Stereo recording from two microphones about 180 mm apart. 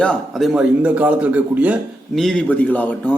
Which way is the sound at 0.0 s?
5° left (ahead or behind).